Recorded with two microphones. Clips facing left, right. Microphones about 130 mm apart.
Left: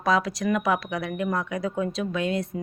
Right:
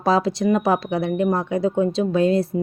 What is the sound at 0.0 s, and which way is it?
A woman's voice, 30° right (ahead or behind).